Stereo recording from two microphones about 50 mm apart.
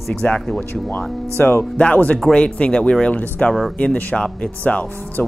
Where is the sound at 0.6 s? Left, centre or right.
Left.